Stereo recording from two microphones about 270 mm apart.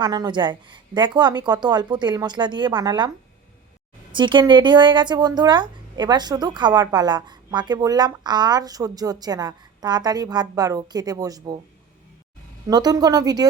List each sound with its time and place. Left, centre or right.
0.0 s speech: centre
4.1 s speech: centre
12.6 s speech: centre